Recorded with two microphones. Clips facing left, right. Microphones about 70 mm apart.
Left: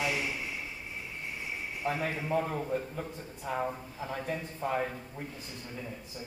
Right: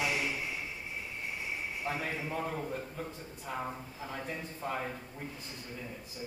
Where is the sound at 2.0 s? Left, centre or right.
Centre.